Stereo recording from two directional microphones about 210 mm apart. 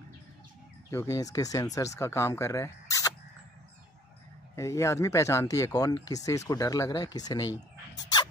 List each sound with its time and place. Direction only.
0.8 s speech: 15° left (ahead or behind)
4.6 s speech: 15° left (ahead or behind)